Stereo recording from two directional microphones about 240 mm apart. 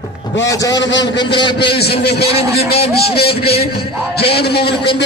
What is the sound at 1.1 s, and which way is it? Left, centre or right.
Speech, centre.